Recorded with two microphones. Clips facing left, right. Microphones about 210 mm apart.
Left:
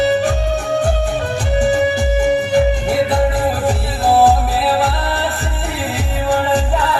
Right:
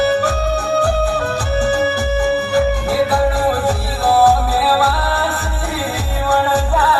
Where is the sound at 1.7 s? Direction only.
20° left (ahead or behind).